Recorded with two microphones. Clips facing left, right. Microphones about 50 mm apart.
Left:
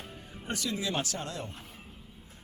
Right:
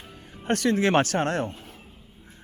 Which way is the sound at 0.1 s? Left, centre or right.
Right.